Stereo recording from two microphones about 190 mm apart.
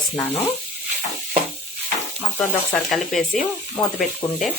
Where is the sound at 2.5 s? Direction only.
Centre (ahead or behind).